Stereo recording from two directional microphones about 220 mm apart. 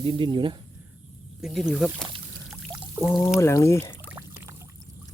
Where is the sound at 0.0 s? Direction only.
25° right (ahead or behind).